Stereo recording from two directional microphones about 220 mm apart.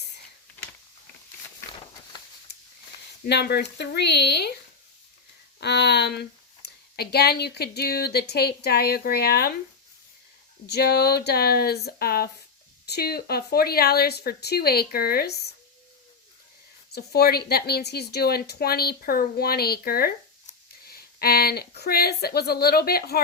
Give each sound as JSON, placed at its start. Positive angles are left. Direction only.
{"t": 1.5, "sound": "a sound", "side_deg": 20}
{"t": 3.2, "sound": "speech", "side_deg": 50}
{"t": 5.5, "sound": "speech", "side_deg": 50}
{"t": 10.7, "sound": "speech", "side_deg": 45}
{"t": 16.9, "sound": "speech", "side_deg": 45}